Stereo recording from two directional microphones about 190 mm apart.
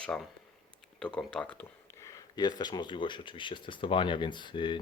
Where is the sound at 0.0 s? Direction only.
5° left (ahead or behind).